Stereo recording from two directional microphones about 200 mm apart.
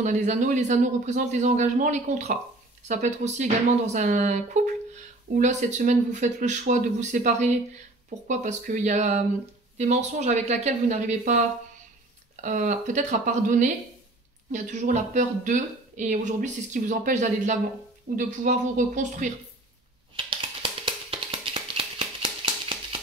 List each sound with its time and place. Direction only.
0.0 s speech: 35° right (ahead or behind)
12.4 s speech: 40° right (ahead or behind)
20.2 s music: 25° right (ahead or behind)